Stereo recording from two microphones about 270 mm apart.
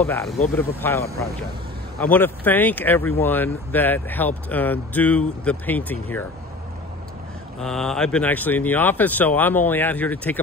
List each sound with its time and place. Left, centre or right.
0.0 s speech: centre
2.0 s speech: centre
7.5 s speech: centre